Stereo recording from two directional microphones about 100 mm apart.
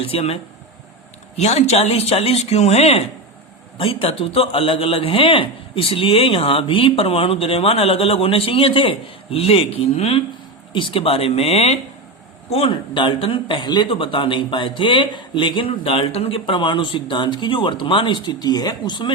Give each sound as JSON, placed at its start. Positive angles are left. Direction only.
{"t": 0.0, "sound": "speech", "side_deg": 80}
{"t": 1.4, "sound": "speech", "side_deg": 90}
{"t": 3.8, "sound": "a man's voice", "side_deg": 65}
{"t": 10.7, "sound": "a man's voice", "side_deg": 55}
{"t": 12.5, "sound": "a man's voice", "side_deg": 75}
{"t": 12.7, "sound": "a man's voice", "side_deg": 55}